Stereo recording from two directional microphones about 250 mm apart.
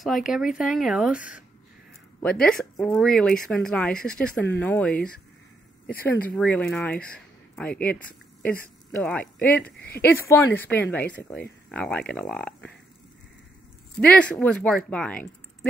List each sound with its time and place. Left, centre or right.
0.3 s speech: centre
2.2 s speech: centre
6.3 s a woman's voice: centre
9.7 s speech: left
10.0 s a woman's voice: centre
13.9 s speech: centre